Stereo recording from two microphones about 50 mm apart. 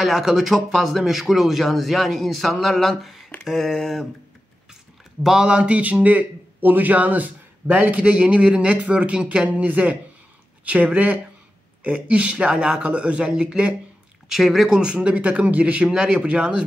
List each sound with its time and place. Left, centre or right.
0.0 s speech: centre
5.2 s speech: centre
5.8 s a man's voice: right
14.3 s speech: centre
14.7 s a man's voice: centre
15.1 s a man's voice: right